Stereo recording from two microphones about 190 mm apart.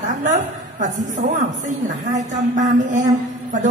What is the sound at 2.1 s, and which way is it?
Speech, 40° right (ahead or behind).